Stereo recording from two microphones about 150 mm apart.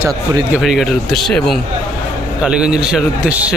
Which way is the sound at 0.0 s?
25° right (ahead or behind).